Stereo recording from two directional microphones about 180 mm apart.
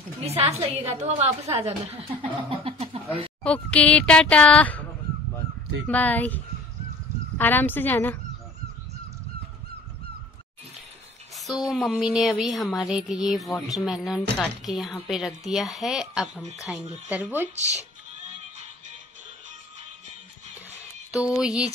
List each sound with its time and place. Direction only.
0.2 s speech: 35° right (ahead or behind)
3.4 s speech: 5° left (ahead or behind)
5.9 s speech: 10° left (ahead or behind)
11.3 s a sound: centre (ahead or behind)
11.7 s speech: centre (ahead or behind)
21.2 s speech: 5° right (ahead or behind)